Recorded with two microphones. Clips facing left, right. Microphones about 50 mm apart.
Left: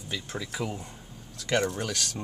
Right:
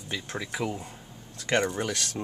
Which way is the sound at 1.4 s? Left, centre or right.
Right.